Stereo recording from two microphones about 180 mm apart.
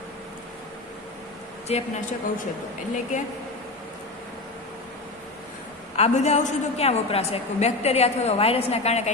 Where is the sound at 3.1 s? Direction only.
45° left (ahead or behind).